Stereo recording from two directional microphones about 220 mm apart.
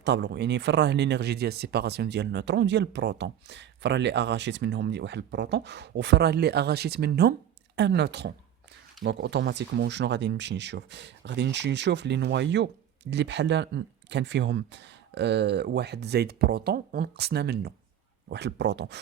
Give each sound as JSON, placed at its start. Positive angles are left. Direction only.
{"t": 0.0, "sound": "speech", "side_deg": -50}